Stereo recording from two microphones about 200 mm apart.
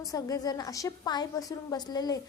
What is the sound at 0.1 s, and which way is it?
A woman's voice, 20° left (ahead or behind).